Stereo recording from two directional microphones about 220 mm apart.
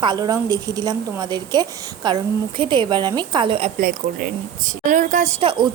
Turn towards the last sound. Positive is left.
turn(degrees=-25)  # may be behind; listen again after turning